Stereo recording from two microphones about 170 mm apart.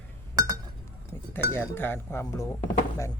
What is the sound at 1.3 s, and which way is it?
Speech, 10° left (ahead or behind).